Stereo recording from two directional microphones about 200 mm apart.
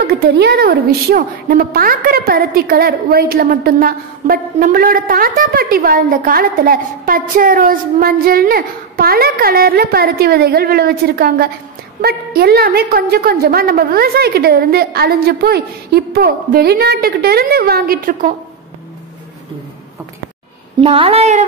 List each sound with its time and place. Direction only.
0.0 s a woman's voice: 50° right (ahead or behind)
20.8 s a woman's voice: 30° right (ahead or behind)